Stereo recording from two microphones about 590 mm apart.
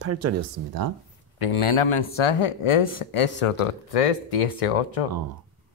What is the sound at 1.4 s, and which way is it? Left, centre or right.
Speech, left.